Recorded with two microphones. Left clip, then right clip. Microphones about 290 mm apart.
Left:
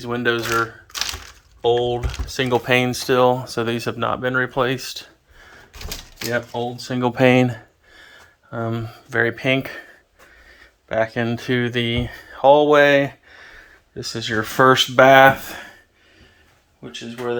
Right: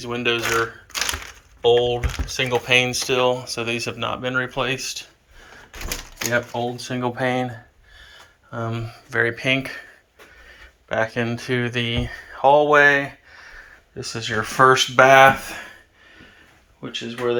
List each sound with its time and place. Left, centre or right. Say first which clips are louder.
0.0 s speech: left 1 dB; left
1.6 s speech: right 2 dB; left
6.3 s speech: right 1 dB; centre
10.8 s speech: left 2 dB; centre
16.8 s speech: right 3 dB; centre